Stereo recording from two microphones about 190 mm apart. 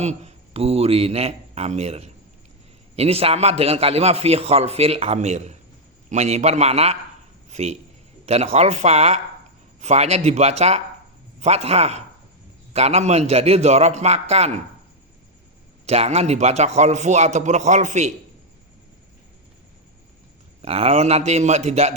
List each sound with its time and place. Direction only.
0.0 s a man's voice: 35° right (ahead or behind)
15.9 s a man's voice: 35° right (ahead or behind)
20.6 s a man's voice: 30° right (ahead or behind)